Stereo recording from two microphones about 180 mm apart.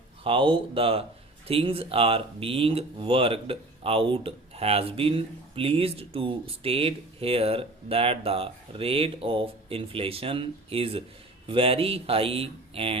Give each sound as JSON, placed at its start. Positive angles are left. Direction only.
{"t": 0.3, "sound": "speech", "side_deg": -30}